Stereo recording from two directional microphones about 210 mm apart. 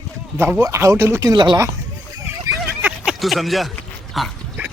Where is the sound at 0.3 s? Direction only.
10° right (ahead or behind).